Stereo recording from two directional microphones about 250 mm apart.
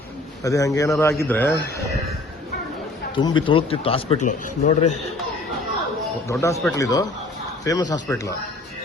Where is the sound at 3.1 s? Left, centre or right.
Centre.